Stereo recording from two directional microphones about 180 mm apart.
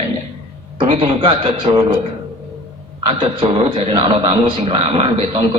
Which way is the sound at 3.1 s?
30° right (ahead or behind).